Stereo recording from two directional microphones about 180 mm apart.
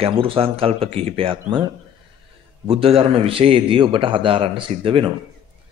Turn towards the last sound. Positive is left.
turn(degrees=-30)  # may be behind; listen again after turning